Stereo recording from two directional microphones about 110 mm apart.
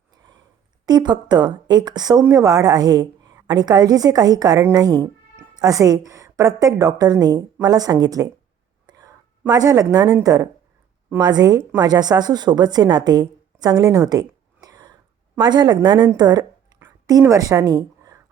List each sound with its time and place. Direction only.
0.9 s a woman's voice: 40° right (ahead or behind)
8.9 s whispering: 35° right (ahead or behind)
9.5 s a woman's voice: 35° right (ahead or behind)